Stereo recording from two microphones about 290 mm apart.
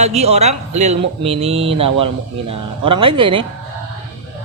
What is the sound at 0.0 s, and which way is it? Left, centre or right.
A man's voice, right.